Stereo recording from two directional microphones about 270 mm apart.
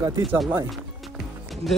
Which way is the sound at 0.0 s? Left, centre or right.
Centre.